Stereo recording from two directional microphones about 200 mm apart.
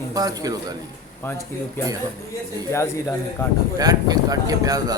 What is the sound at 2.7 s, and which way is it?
Speech, 15° left (ahead or behind).